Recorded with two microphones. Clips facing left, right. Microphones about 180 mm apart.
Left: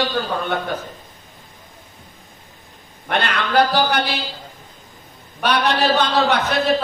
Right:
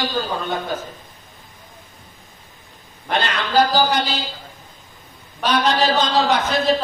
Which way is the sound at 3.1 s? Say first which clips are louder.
Even; 60° left (ahead or behind).